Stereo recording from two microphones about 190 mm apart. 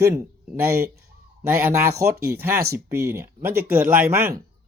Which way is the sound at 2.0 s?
55° right (ahead or behind).